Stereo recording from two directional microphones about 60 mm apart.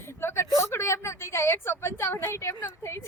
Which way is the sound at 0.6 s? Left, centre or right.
Left.